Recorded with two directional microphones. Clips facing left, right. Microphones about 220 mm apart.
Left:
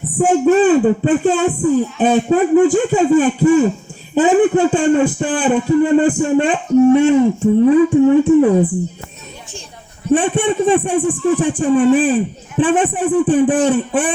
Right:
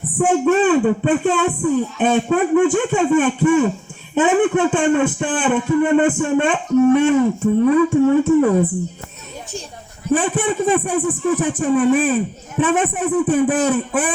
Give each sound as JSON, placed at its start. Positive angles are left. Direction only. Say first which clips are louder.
{"t": 0.2, "sound": "a man's voice", "louder": "left 3 dB", "side_deg": 30}
{"t": 10.1, "sound": "speech", "louder": "left 3 dB", "side_deg": 30}